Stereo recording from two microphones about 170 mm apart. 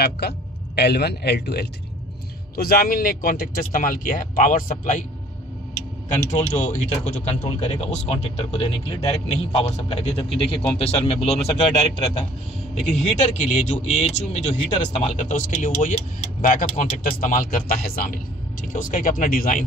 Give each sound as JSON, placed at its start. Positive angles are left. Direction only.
{"t": 0.2, "sound": "a man's voice", "side_deg": 80}
{"t": 2.5, "sound": "speech", "side_deg": 60}
{"t": 6.1, "sound": "speech", "side_deg": 45}